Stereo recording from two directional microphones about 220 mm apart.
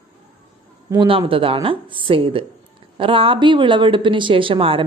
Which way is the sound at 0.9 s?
20° right (ahead or behind).